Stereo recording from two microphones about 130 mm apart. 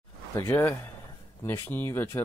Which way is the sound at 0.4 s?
20° left (ahead or behind).